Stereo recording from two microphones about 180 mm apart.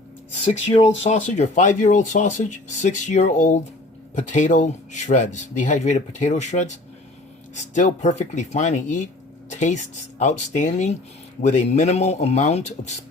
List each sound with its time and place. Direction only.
1.0 s speech: 40° left (ahead or behind)